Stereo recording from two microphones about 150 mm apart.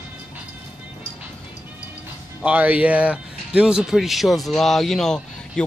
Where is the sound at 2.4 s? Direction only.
10° right (ahead or behind).